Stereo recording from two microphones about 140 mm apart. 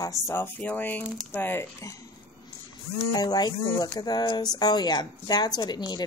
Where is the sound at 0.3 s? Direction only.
15° left (ahead or behind).